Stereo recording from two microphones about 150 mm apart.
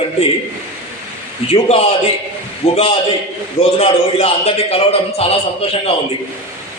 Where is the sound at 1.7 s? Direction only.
45° left (ahead or behind).